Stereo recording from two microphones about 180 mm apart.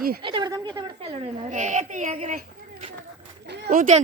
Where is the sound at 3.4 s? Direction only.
65° right (ahead or behind).